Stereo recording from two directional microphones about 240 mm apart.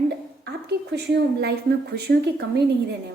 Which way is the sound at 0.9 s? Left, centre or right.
Right.